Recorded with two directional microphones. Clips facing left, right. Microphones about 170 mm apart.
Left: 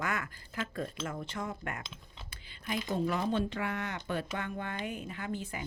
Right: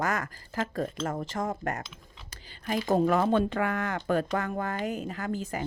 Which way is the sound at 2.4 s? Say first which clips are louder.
Right 6 dB; 40° right (ahead or behind).